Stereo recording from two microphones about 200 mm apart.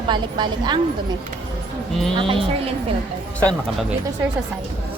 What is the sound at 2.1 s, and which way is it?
Speech, 25° right (ahead or behind).